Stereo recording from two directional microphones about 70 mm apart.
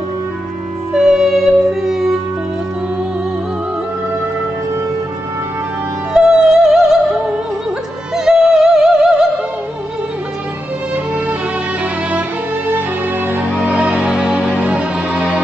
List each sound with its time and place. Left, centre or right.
0.9 s music: centre
6.1 s music: centre
8.3 s music: centre
11.8 s music: right
13.6 s music: centre